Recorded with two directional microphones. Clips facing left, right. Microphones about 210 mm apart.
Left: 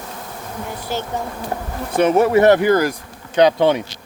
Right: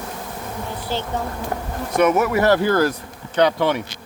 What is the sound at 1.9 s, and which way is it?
Speech, 30° left (ahead or behind).